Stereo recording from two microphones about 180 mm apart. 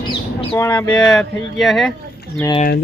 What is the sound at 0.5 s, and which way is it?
Speech, 10° left (ahead or behind).